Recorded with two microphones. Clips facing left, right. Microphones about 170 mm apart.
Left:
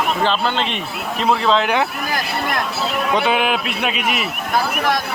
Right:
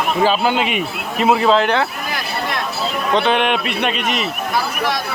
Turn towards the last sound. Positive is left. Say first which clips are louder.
# right 2 dB
turn(degrees=5)  # may be behind; listen again after turning